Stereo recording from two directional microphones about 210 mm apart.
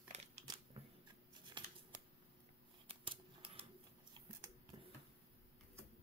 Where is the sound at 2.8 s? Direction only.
25° right (ahead or behind).